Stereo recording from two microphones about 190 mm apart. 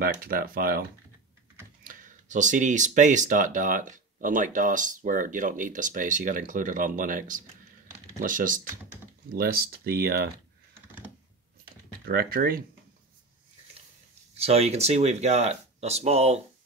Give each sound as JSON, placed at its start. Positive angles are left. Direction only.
{"t": 0.0, "sound": "speech", "side_deg": -50}
{"t": 1.9, "sound": "speech", "side_deg": -40}
{"t": 12.1, "sound": "speech", "side_deg": -50}
{"t": 14.3, "sound": "speech", "side_deg": -35}